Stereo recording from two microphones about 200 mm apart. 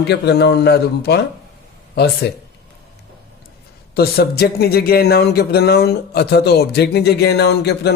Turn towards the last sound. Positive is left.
turn(degrees=55)  # may be behind; listen again after turning